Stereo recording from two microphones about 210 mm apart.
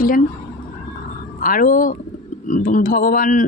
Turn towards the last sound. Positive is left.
turn(degrees=40)  # may be behind; listen again after turning